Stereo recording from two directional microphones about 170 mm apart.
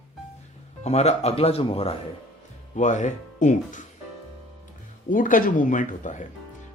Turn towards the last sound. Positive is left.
turn(degrees=45)  # may be behind; listen again after turning